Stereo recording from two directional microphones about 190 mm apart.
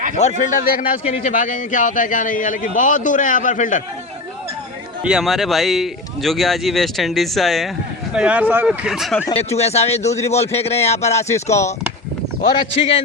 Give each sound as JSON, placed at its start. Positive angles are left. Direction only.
{"t": 0.2, "sound": "a man's voice", "side_deg": 40}
{"t": 5.0, "sound": "speech", "side_deg": 0}
{"t": 9.3, "sound": "a man's voice", "side_deg": 35}
{"t": 11.4, "sound": "speech", "side_deg": 15}
{"t": 12.4, "sound": "a man's voice", "side_deg": 30}